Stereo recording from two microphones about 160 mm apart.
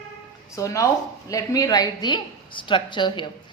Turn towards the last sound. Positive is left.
turn(degrees=30)  # may be behind; listen again after turning